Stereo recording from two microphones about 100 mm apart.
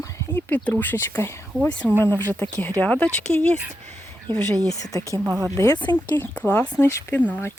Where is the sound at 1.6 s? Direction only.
10° left (ahead or behind).